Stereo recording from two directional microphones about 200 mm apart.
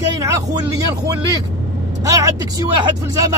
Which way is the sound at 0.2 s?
15° right (ahead or behind).